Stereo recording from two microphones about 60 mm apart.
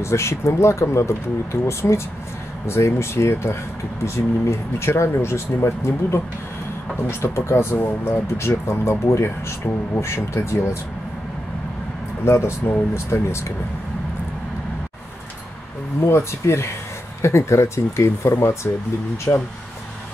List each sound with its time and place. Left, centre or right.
0.0 s speech: left
12.3 s speech: left
16.1 s speech: left